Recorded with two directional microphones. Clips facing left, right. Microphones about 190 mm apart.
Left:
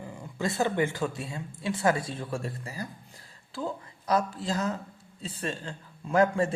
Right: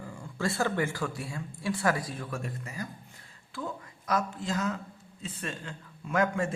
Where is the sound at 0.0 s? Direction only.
20° left (ahead or behind).